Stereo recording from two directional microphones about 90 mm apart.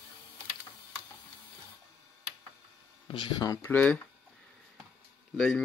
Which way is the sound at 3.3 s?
45° left (ahead or behind).